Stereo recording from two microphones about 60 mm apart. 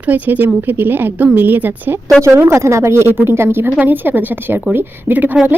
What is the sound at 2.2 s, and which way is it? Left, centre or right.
A woman's voice, right.